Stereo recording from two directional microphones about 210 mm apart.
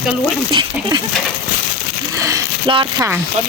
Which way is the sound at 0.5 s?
20° right (ahead or behind).